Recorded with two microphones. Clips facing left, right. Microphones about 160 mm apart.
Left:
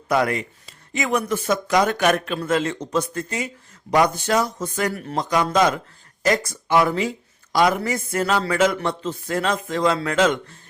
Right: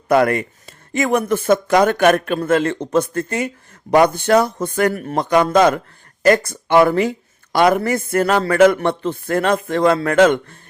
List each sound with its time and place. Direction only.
0.1 s speech: 55° right (ahead or behind)